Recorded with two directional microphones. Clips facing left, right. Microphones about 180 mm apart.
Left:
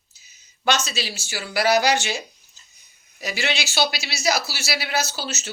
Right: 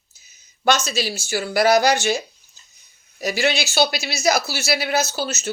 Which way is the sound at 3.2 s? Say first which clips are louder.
Right 6 dB; 45° right (ahead or behind).